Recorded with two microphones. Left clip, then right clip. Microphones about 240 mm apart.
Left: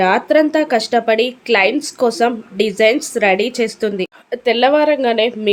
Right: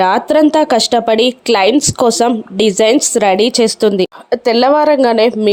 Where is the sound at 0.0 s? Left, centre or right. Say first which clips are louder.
Right 3 dB; right.